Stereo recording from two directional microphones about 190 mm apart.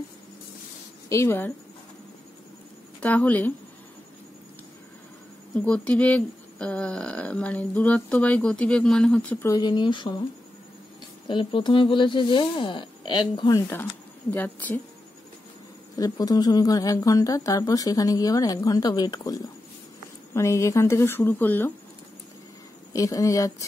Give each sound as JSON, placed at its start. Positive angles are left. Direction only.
{"t": 1.0, "sound": "speech", "side_deg": 15}
{"t": 3.0, "sound": "speech", "side_deg": 10}
{"t": 5.7, "sound": "speech", "side_deg": 5}
{"t": 11.2, "sound": "speech", "side_deg": 25}
{"t": 16.0, "sound": "speech", "side_deg": 20}
{"t": 22.9, "sound": "speech", "side_deg": 15}